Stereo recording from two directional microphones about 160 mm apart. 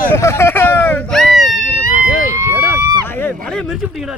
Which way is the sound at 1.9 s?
55° right (ahead or behind).